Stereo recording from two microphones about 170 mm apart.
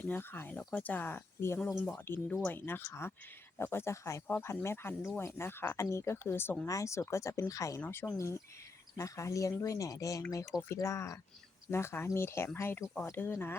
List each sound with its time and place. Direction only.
0.0 s speech: 10° left (ahead or behind)